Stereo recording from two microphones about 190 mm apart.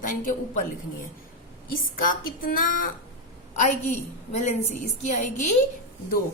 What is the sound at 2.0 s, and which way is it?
A woman's voice, 45° left (ahead or behind).